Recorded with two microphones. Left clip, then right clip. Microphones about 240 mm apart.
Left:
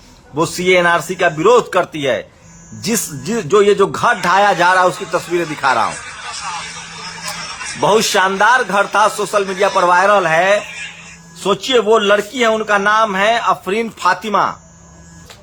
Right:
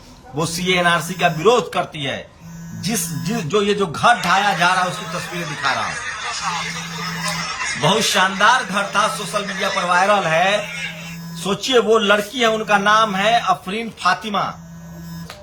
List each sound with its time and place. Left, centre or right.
0.3 s a man's voice: centre
5.8 s fowl: centre
7.9 s a man's voice: centre
10.7 s music: centre
11.4 s a man's voice: centre